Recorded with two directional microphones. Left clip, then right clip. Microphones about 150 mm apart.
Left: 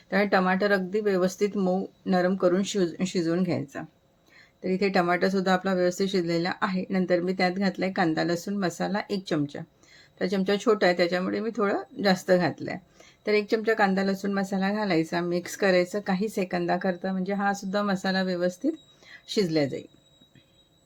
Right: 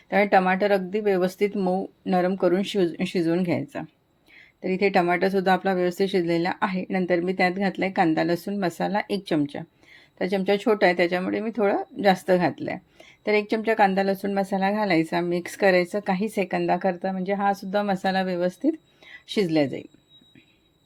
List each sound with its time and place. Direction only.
0.1 s speech: 10° right (ahead or behind)